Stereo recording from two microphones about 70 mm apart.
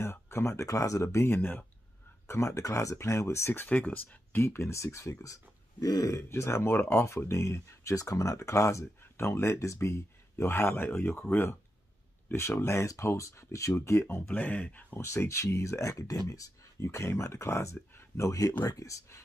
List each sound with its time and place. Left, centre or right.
0.0 s speech: left
2.2 s speech: left
3.6 s speech: left
7.9 s speech: left
14.3 s speech: left
15.0 s speech: left